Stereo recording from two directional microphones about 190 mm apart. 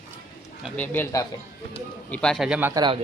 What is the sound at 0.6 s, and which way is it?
Speech, 5° left (ahead or behind).